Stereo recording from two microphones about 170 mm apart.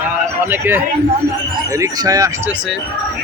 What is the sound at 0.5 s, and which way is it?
Speech, 10° right (ahead or behind).